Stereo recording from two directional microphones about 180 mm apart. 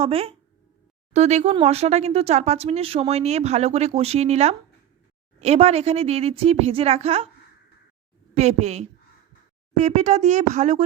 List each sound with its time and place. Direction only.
0.0 s speech: 35° right (ahead or behind)
8.4 s speech: 40° right (ahead or behind)